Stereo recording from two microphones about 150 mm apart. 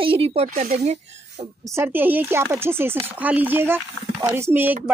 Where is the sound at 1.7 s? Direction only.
15° right (ahead or behind).